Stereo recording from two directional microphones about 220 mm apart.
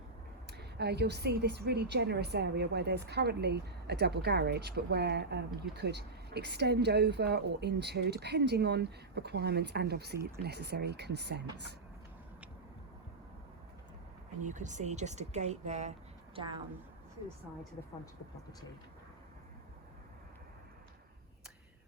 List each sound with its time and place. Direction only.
0.5 s a woman's voice: 50° right (ahead or behind)
14.4 s speech: 35° right (ahead or behind)